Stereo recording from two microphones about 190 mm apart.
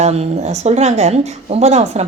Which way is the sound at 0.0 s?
35° right (ahead or behind).